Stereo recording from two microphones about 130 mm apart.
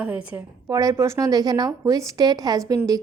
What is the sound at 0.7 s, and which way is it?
Speech, 25° right (ahead or behind).